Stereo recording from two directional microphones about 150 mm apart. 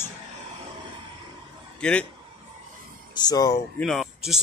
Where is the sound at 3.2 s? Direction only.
25° left (ahead or behind).